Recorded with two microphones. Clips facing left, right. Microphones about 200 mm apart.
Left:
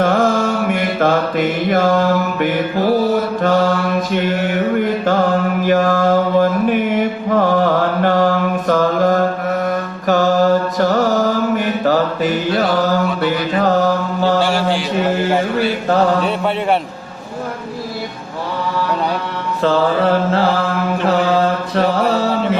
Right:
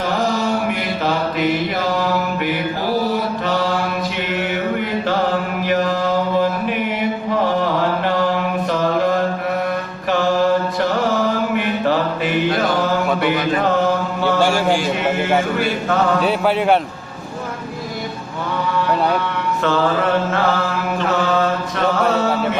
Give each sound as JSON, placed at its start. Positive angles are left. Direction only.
{"t": 0.0, "sound": "mantra", "side_deg": 50}
{"t": 19.6, "sound": "mantra", "side_deg": 30}